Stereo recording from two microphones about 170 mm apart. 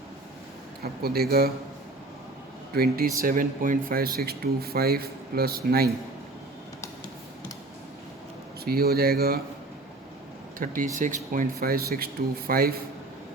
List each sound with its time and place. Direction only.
1.0 s speech: 65° right (ahead or behind)
2.7 s speech: 65° right (ahead or behind)
8.6 s speech: 65° right (ahead or behind)
10.6 s speech: 50° right (ahead or behind)